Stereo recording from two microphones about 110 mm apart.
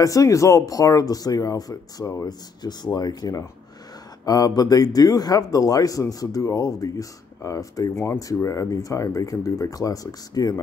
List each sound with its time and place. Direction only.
0.0 s speech: 30° left (ahead or behind)